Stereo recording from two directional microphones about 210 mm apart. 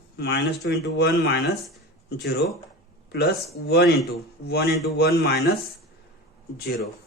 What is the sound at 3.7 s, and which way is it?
Speech, 50° left (ahead or behind).